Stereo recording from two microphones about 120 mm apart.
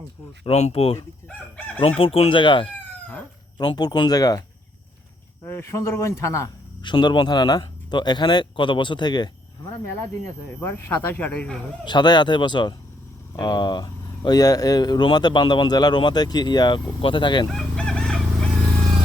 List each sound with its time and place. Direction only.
0.4 s speech: 60° left (ahead or behind); by 4.4 s 30° left (ahead or behind)
5.5 s a man's voice: 20° left (ahead or behind)
6.8 s speech: 40° left (ahead or behind)
10.6 s speech: 20° left (ahead or behind)
11.9 s speech: 35° left (ahead or behind)
17.5 s fowl: 5° left (ahead or behind)